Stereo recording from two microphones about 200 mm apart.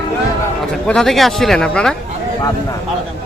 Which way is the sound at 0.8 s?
Centre (ahead or behind).